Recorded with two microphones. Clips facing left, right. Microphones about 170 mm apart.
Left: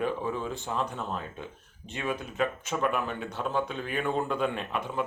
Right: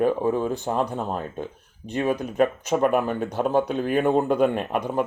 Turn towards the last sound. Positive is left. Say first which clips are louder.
# right 7 dB
turn(degrees=-45)  # may be behind; listen again after turning